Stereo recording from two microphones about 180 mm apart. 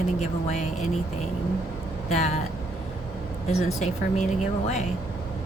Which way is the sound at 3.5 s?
40° left (ahead or behind).